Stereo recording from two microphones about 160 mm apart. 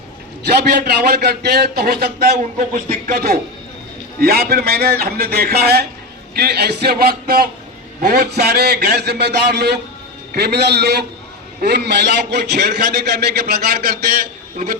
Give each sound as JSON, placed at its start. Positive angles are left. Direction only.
{"t": 0.4, "sound": "a man's voice", "side_deg": -90}
{"t": 2.4, "sound": "a man's voice", "side_deg": -50}
{"t": 8.0, "sound": "a man's voice", "side_deg": -80}